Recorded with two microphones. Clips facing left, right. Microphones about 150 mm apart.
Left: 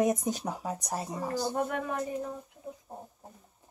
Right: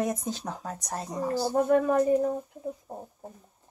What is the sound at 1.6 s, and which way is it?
Speech, 40° right (ahead or behind).